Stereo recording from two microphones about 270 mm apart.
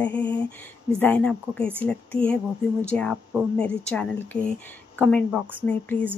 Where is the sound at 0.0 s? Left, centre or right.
Centre.